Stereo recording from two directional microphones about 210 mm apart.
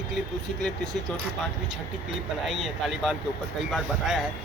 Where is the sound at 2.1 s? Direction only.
Centre (ahead or behind).